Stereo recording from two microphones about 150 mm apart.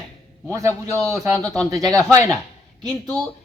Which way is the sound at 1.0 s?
5° left (ahead or behind).